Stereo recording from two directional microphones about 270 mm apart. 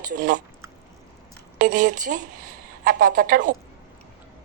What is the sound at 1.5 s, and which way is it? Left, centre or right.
A woman's voice, right.